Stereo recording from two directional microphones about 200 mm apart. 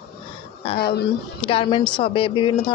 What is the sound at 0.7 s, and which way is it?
Speech, 50° left (ahead or behind).